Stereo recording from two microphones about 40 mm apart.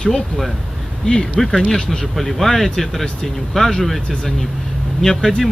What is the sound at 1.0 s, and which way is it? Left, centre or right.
Speech, centre.